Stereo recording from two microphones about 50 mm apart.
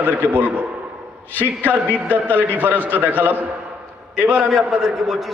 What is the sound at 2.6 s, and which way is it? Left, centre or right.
Speech, right.